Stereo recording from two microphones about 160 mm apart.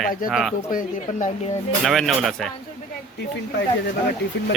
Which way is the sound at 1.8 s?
Centre (ahead or behind).